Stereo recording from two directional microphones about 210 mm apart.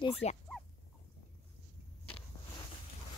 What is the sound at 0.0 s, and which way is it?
Speech, 30° left (ahead or behind).